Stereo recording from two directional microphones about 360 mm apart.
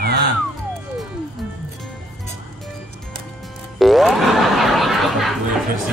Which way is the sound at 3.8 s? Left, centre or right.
Centre.